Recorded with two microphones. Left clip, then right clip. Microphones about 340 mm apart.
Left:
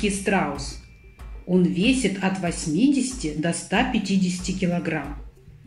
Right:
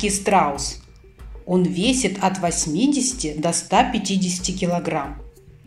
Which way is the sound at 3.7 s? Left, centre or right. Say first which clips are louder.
Right 5 dB; centre.